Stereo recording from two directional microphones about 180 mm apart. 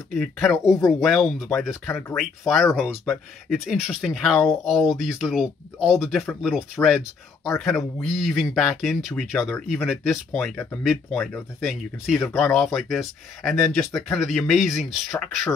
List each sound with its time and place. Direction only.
0.1 s speech: centre (ahead or behind)
0.7 s speech: 20° left (ahead or behind)
1.0 s speech: centre (ahead or behind)
12.2 s speech: 10° left (ahead or behind)
12.5 s speech: centre (ahead or behind)